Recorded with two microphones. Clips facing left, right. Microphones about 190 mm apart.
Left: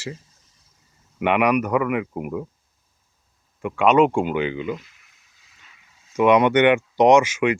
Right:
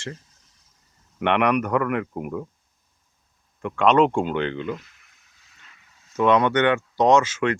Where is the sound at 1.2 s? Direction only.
5° left (ahead or behind).